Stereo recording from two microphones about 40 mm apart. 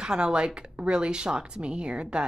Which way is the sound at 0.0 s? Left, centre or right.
Right.